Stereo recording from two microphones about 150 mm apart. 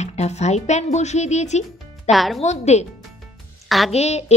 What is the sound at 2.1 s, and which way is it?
Speech, centre (ahead or behind).